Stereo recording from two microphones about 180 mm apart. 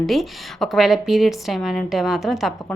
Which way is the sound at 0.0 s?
Centre (ahead or behind).